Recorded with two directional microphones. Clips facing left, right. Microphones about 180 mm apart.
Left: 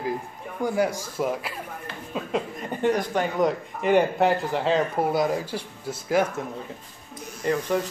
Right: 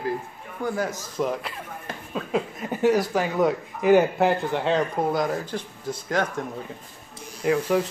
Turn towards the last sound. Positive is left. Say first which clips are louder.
# right 2 dB
turn(degrees=-5)  # may be behind; listen again after turning